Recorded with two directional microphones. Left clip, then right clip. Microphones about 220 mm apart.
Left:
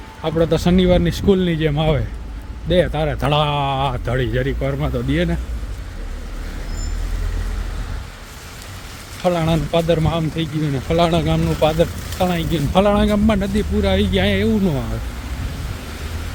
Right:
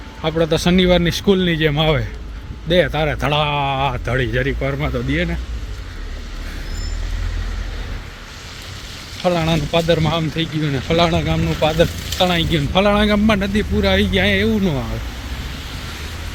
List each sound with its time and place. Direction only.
0.2 s speech: 10° left (ahead or behind)
3.2 s a man's voice: 15° left (ahead or behind)
5.1 s speech: 25° left (ahead or behind)
9.2 s speech: 10° left (ahead or behind)
11.1 s speech: 20° left (ahead or behind)
11.8 s speech: centre (ahead or behind)
12.7 s a man's voice: 10° left (ahead or behind)